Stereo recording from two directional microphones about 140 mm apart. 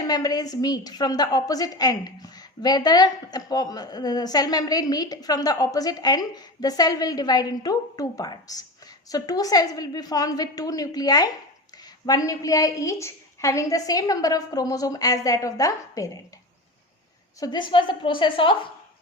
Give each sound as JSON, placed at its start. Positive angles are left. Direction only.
{"t": 0.1, "sound": "a woman's voice", "side_deg": 30}
{"t": 17.4, "sound": "a woman's voice", "side_deg": 35}